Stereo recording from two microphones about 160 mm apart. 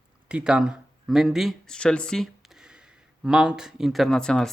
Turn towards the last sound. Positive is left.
turn(degrees=5)  # may be behind; listen again after turning